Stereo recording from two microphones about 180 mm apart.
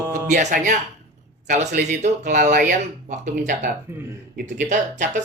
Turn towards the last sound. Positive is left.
turn(degrees=-40)  # may be behind; listen again after turning